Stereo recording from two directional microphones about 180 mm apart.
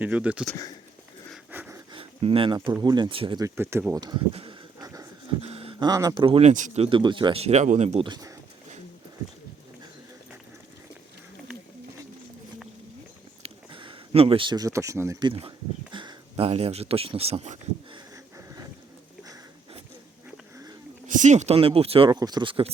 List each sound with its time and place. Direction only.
0.0 s speech: 5° right (ahead or behind)
1.5 s a sound: 10° right (ahead or behind)
1.9 s speech: 30° right (ahead or behind); by 4.0 s 15° right (ahead or behind)
4.0 s a sound: 25° right (ahead or behind)
5.9 s speech: 20° right (ahead or behind); by 8.0 s 40° right (ahead or behind)
8.0 s speech: 25° right (ahead or behind)
13.4 s a sound: 30° right (ahead or behind)
15.3 s speech: 30° right (ahead or behind)
18.3 s boat: 20° right (ahead or behind)
21.1 s speech: 40° right (ahead or behind)